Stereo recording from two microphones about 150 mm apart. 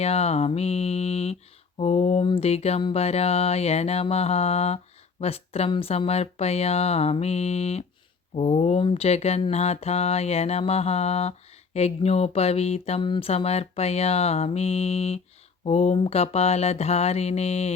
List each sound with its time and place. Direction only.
0.0 s mantra: 45° left (ahead or behind)